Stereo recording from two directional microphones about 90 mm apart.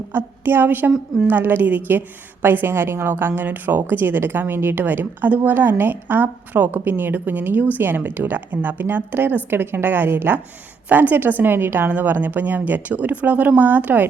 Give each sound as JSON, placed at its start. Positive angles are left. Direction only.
{"t": 0.1, "sound": "a woman's voice", "side_deg": -25}